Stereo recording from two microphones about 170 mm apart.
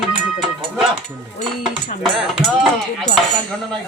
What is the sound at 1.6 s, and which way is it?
Speech, centre (ahead or behind).